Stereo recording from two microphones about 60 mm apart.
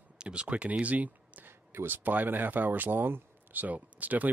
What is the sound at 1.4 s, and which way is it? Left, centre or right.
Speech, right.